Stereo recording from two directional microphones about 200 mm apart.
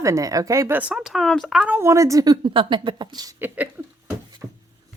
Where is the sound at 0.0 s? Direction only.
15° right (ahead or behind).